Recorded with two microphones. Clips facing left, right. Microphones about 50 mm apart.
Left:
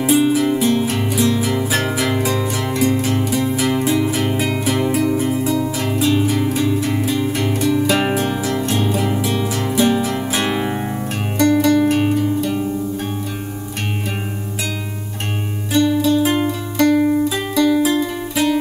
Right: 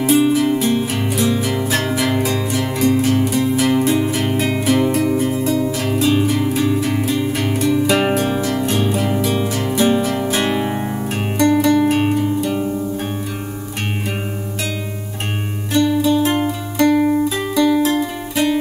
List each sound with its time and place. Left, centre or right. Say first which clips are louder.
0.0 s music: right 1 dB; centre
15.7 s music: even; centre